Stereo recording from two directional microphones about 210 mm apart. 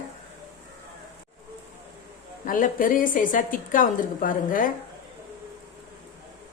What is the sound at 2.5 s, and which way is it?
A woman's voice, 40° left (ahead or behind).